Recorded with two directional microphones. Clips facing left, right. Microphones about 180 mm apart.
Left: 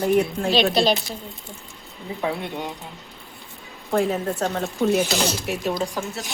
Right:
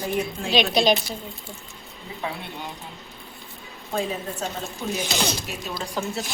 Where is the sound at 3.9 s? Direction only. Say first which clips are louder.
Left 6 dB; 65° left (ahead or behind).